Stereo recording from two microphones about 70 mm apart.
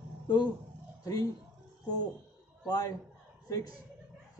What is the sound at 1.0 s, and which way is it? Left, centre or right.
Speech, left.